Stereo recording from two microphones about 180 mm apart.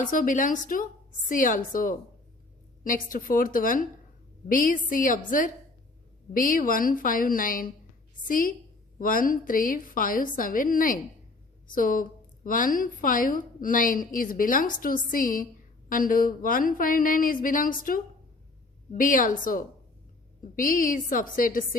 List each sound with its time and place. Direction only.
0.0 s a woman's voice: 45° left (ahead or behind)